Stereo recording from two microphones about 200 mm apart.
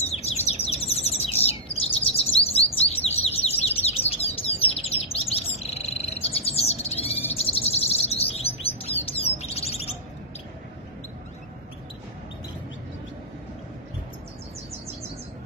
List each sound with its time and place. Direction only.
0.0 s bird: 30° left (ahead or behind)